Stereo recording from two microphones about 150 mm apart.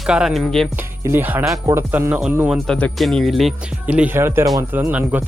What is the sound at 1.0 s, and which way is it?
Speech, 15° right (ahead or behind).